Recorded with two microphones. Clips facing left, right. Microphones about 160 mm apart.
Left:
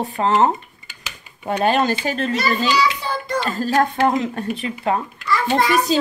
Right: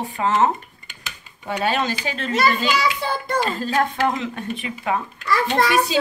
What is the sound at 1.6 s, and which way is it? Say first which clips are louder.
Speech: left 4 dB; 45° left (ahead or behind).